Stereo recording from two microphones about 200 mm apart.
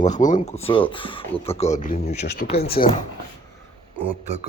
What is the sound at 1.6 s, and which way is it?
Speech, 40° left (ahead or behind).